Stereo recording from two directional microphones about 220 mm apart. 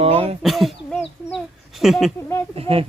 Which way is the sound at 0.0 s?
25° right (ahead or behind).